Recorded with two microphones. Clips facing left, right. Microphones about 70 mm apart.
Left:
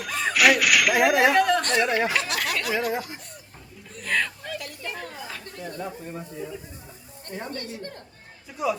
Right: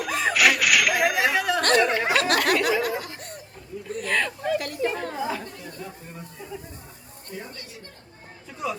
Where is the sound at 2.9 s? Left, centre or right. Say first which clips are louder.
Left 1 dB; left.